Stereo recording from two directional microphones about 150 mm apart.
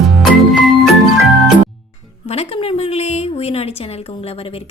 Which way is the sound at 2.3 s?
40° left (ahead or behind).